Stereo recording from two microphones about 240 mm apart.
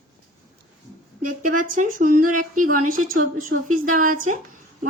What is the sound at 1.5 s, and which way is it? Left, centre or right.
A woman's voice, right.